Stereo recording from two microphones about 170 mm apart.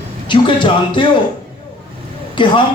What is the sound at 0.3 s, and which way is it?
Speech, 30° left (ahead or behind).